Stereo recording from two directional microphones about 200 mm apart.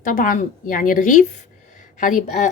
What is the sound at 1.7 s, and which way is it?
Speech, 40° left (ahead or behind).